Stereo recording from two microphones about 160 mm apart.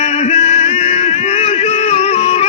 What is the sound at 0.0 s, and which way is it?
Music, 40° left (ahead or behind).